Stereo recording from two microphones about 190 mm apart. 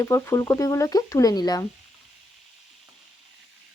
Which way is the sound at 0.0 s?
15° left (ahead or behind).